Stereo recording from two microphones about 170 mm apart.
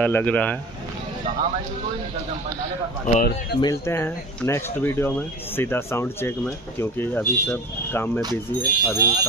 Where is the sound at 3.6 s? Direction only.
20° left (ahead or behind).